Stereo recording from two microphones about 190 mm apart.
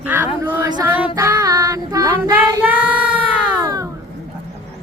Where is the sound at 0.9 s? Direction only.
10° right (ahead or behind).